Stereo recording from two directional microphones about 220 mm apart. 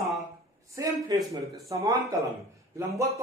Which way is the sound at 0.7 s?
15° right (ahead or behind).